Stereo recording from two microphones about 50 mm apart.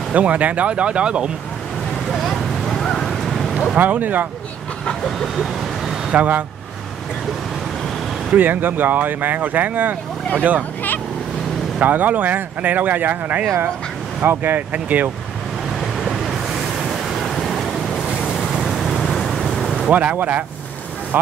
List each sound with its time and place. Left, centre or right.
0.1 s speech: right
2.0 s a sound: centre
3.7 s speech: right
5.0 s speech: centre
6.1 s speech: right
8.3 s speech: right
11.8 s speech: right
16.0 s waves: centre
18.2 s vehicle: centre
19.9 s speech: right